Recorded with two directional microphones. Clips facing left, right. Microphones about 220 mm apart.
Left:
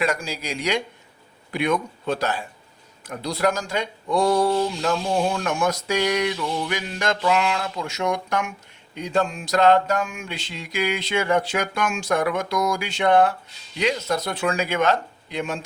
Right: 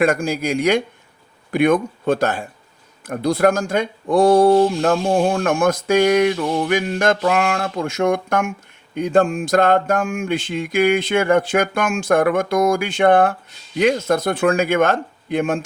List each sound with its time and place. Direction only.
0.0 s speech: 50° right (ahead or behind)